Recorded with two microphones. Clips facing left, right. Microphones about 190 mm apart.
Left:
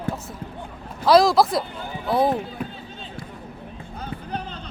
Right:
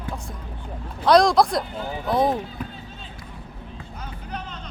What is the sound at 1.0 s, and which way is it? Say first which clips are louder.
Speech: even; 5° left (ahead or behind).